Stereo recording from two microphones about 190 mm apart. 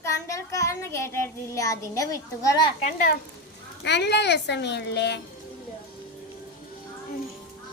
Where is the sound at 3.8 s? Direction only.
65° left (ahead or behind).